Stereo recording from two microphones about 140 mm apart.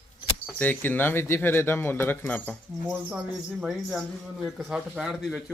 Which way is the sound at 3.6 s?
Centre (ahead or behind).